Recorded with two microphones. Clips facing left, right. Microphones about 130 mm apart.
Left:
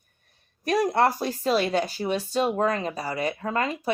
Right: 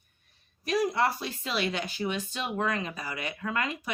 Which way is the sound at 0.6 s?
50° left (ahead or behind).